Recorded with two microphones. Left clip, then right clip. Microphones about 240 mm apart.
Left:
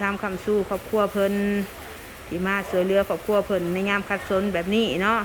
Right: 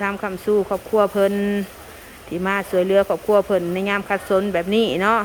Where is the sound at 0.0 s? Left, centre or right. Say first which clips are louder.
Right 3 dB; centre.